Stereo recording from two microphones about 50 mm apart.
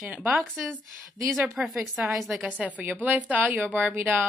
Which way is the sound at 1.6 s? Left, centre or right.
Centre.